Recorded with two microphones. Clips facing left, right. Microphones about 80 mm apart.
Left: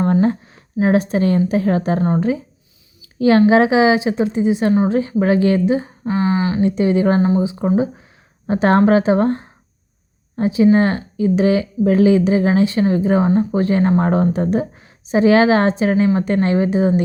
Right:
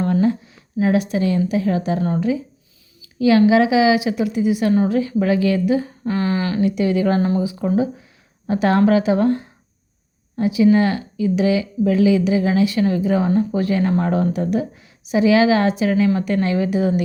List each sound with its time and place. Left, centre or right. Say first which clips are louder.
0.0 s speech: left 2 dB; left